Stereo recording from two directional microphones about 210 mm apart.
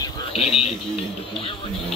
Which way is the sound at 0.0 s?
30° left (ahead or behind).